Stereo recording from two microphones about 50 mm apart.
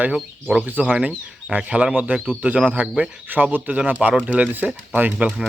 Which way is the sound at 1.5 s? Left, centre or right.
Centre.